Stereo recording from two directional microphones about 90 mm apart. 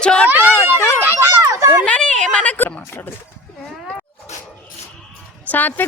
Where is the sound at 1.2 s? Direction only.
35° right (ahead or behind).